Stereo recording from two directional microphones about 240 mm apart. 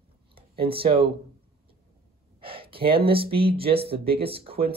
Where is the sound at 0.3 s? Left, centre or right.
Right.